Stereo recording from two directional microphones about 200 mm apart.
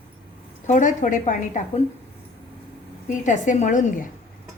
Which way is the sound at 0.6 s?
35° left (ahead or behind).